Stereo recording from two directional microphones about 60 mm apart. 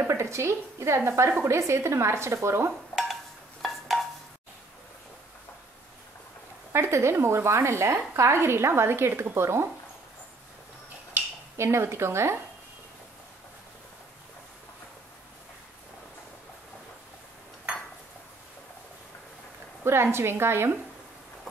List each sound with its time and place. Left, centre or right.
0.0 s a woman's voice: right
3.6 s a sound: centre
6.7 s a woman's voice: right
11.5 s a woman's voice: right
19.8 s a woman's voice: right